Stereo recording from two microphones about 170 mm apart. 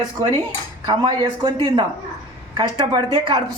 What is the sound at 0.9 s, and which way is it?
Speech, 25° right (ahead or behind).